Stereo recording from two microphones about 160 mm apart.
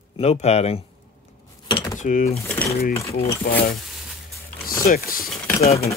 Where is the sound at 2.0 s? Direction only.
50° left (ahead or behind).